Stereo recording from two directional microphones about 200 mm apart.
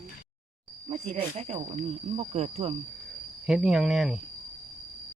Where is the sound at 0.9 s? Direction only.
30° right (ahead or behind).